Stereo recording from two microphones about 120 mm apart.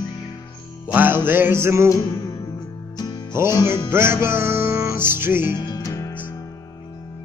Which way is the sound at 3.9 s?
20° right (ahead or behind).